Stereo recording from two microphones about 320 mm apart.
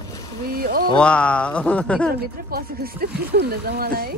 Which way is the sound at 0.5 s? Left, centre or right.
Right.